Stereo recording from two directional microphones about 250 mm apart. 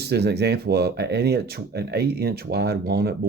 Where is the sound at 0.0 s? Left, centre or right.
Right.